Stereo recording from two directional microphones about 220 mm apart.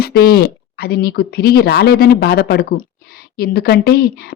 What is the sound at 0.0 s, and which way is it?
A woman's voice, 45° left (ahead or behind).